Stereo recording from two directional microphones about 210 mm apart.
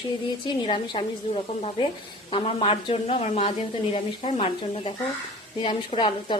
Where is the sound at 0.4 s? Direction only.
25° left (ahead or behind).